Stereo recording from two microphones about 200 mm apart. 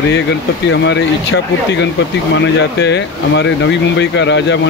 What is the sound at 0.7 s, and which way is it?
Speech, 60° left (ahead or behind).